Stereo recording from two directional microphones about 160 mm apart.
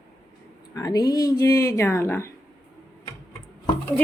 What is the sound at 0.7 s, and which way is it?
Speech, 25° left (ahead or behind).